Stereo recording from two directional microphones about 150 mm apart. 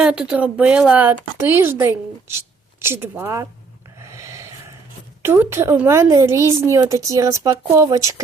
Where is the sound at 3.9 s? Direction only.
20° right (ahead or behind).